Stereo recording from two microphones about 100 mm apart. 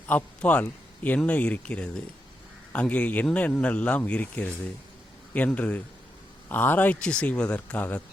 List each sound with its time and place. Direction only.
0.1 s speech: 15° left (ahead or behind)